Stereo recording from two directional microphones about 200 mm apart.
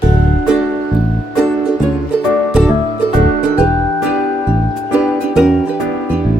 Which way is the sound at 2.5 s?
Centre (ahead or behind).